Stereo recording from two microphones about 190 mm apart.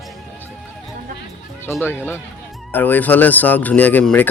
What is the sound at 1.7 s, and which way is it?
Speech, 15° left (ahead or behind).